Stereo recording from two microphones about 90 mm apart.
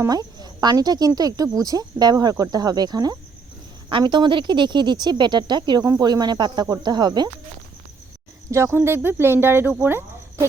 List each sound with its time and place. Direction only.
0.1 s speech: 50° right (ahead or behind)
3.8 s speech: 65° right (ahead or behind)
8.4 s speech: 30° right (ahead or behind)
9.8 s cricket: 25° right (ahead or behind)